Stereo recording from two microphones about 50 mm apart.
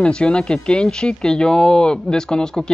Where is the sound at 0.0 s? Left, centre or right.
Centre.